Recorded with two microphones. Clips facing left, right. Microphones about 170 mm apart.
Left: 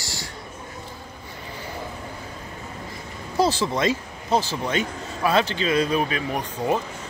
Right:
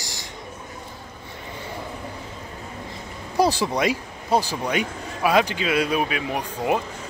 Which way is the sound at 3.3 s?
15° right (ahead or behind).